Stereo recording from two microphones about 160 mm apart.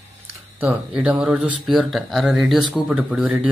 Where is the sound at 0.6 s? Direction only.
10° right (ahead or behind).